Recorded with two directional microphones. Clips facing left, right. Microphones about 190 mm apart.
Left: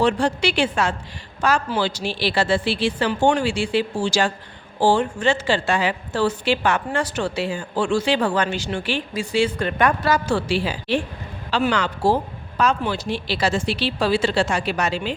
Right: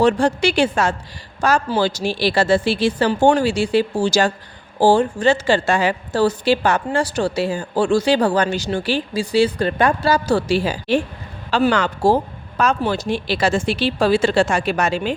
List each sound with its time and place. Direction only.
0.0 s a woman's voice: 45° right (ahead or behind)